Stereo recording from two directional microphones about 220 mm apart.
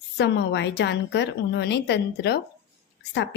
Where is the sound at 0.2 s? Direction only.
50° left (ahead or behind).